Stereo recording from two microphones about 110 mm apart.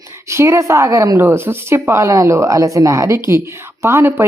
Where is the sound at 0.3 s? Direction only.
25° right (ahead or behind).